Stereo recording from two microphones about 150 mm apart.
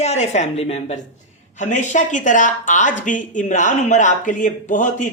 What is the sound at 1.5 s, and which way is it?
Speech, 55° left (ahead or behind).